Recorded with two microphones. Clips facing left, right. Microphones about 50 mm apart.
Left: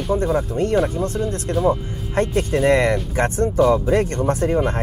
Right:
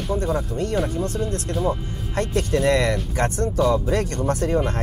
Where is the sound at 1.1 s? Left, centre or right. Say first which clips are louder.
Left 2 dB; left.